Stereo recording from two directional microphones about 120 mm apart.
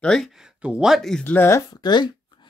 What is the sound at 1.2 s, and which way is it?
Speech, 15° left (ahead or behind).